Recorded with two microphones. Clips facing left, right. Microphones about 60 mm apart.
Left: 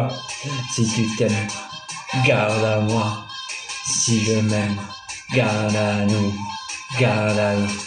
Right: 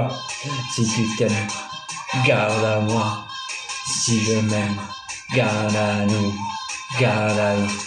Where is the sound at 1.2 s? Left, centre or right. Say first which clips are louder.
Even; centre.